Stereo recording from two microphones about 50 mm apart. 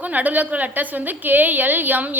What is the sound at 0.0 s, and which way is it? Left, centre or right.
A woman's voice, right.